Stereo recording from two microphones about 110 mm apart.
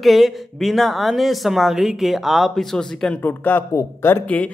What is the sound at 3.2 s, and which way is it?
Speech, 20° left (ahead or behind).